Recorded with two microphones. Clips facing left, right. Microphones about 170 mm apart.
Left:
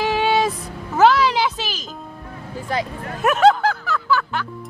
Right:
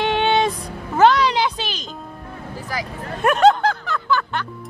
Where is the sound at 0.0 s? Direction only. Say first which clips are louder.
Even; 5° left (ahead or behind).